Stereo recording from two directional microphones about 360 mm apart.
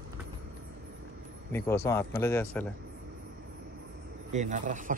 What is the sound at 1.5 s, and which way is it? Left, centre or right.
Speech, centre.